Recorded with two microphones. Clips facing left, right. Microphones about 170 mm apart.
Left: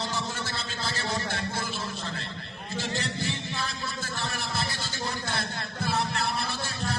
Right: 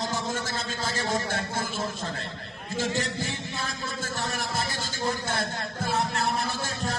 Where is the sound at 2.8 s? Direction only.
45° right (ahead or behind).